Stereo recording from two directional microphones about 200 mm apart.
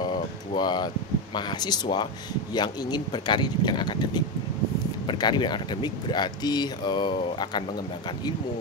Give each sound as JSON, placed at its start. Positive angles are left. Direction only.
{"t": 0.6, "sound": "speech", "side_deg": 20}